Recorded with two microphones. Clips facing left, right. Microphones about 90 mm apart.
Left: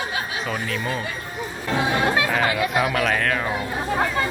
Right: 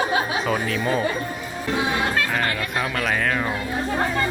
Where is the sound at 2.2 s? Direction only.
5° left (ahead or behind).